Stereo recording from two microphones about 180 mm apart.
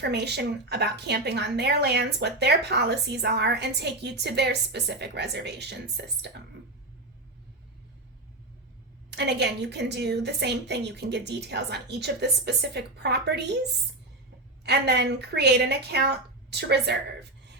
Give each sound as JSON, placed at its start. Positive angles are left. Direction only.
{"t": 0.0, "sound": "a woman's voice", "side_deg": -65}
{"t": 9.0, "sound": "a woman's voice", "side_deg": -70}
{"t": 14.6, "sound": "a woman's voice", "side_deg": -65}